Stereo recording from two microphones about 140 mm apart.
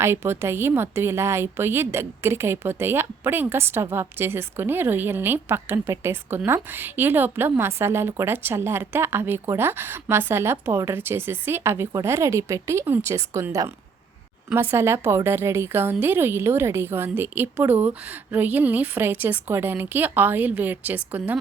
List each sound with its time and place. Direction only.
0.0 s a woman's voice: 20° right (ahead or behind)